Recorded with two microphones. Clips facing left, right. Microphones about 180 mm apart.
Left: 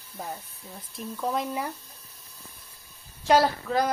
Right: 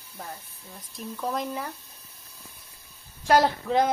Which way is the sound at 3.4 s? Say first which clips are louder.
Right 2 dB; 20° right (ahead or behind).